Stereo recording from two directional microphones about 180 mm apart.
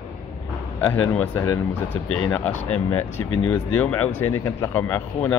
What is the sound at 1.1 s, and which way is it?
Speech, 10° left (ahead or behind).